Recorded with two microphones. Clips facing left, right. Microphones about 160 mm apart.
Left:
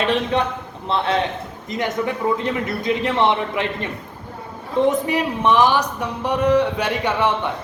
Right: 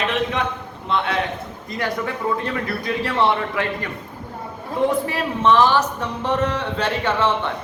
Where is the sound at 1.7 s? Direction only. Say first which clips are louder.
Left 2 dB; 20° left (ahead or behind).